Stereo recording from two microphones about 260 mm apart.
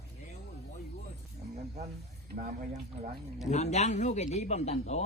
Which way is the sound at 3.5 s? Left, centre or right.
Left.